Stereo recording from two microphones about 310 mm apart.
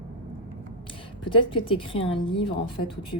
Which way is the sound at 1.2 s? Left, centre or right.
Centre.